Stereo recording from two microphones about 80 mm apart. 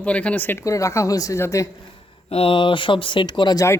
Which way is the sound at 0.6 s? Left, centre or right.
Left.